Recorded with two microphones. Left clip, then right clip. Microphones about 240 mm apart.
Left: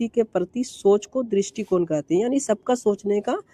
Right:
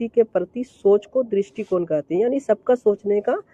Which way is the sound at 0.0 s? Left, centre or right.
Left.